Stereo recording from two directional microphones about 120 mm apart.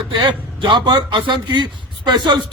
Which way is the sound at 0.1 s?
40° right (ahead or behind).